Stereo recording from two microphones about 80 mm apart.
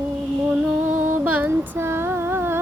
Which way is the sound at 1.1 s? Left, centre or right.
Centre.